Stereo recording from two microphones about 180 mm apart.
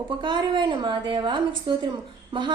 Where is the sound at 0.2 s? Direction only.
25° right (ahead or behind).